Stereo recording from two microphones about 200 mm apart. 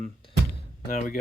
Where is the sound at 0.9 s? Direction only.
40° left (ahead or behind).